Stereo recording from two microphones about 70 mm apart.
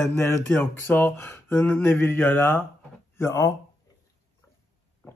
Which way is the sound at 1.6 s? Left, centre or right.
Left.